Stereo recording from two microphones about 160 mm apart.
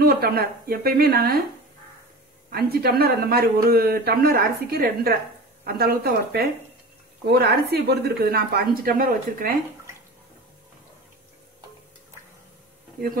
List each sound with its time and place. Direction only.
0.0 s speech: 70° right (ahead or behind)
2.5 s speech: 75° right (ahead or behind)
7.2 s speech: 85° right; by 9.6 s 65° right (ahead or behind)